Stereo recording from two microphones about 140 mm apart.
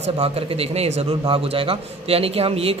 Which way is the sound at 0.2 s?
45° right (ahead or behind).